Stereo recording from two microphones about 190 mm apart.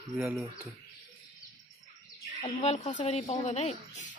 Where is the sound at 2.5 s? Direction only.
40° left (ahead or behind).